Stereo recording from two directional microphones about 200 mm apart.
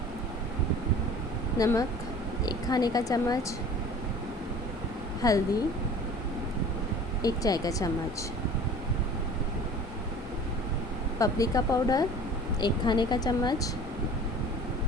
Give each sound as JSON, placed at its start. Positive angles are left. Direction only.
{"t": 1.5, "sound": "speech", "side_deg": 15}
{"t": 5.2, "sound": "speech", "side_deg": 20}
{"t": 7.2, "sound": "speech", "side_deg": 20}
{"t": 11.2, "sound": "speech", "side_deg": 15}